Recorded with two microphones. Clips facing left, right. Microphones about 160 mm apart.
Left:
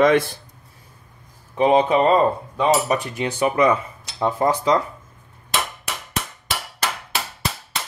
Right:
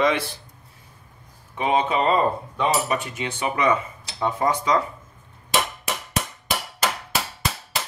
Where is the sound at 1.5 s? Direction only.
40° left (ahead or behind).